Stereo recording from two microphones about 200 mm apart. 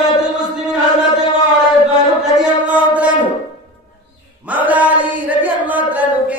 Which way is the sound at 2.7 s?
5° right (ahead or behind).